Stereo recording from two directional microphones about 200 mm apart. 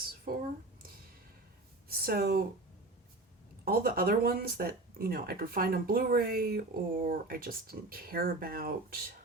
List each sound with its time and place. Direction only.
0.3 s speech: 45° right (ahead or behind)
1.9 s speech: 50° right (ahead or behind)
3.6 s speech: 45° right (ahead or behind)